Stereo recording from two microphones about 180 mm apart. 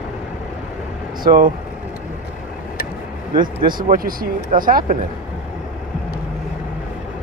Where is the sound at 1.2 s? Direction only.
50° right (ahead or behind).